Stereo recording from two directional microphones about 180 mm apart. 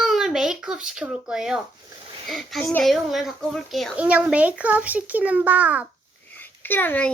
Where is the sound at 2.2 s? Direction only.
Centre (ahead or behind).